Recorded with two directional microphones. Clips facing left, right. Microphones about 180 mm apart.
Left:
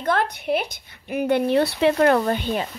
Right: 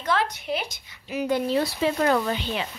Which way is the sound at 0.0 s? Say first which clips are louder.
Left 3 dB; 55° left (ahead or behind).